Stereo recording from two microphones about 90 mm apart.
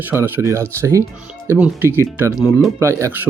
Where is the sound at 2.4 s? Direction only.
Centre (ahead or behind).